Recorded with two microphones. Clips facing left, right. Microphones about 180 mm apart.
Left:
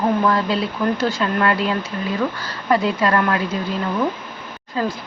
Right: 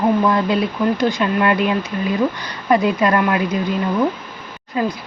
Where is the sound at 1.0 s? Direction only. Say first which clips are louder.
Right 3 dB; 15° right (ahead or behind).